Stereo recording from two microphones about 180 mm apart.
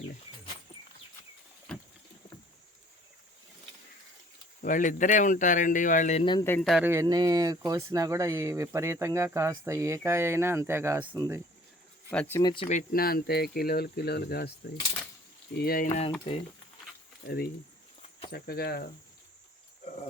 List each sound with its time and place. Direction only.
4.6 s speech: 45° left (ahead or behind)
6.4 s speech: 10° left (ahead or behind)
6.7 s speech: 5° right (ahead or behind)
6.9 s speech: 20° right (ahead or behind)
11.0 s speech: 25° right (ahead or behind)
12.1 s speech: 10° left (ahead or behind)
12.4 s speech: 25° left (ahead or behind)
12.6 s speech: 45° left (ahead or behind)
15.5 s speech: 55° left (ahead or behind)
17.2 s speech: 60° left (ahead or behind)